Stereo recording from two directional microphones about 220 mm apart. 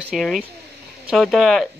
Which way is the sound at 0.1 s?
Centre (ahead or behind).